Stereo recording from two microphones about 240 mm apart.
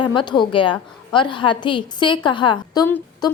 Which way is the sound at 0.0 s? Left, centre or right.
Centre.